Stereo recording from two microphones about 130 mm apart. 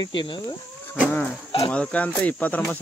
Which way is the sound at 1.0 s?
10° left (ahead or behind).